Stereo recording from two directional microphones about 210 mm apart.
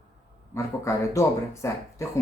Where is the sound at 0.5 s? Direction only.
15° left (ahead or behind).